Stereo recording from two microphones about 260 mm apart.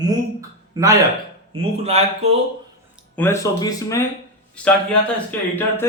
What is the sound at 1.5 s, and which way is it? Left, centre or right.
Speech, right.